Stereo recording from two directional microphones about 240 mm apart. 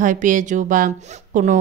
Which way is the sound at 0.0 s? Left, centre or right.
Right.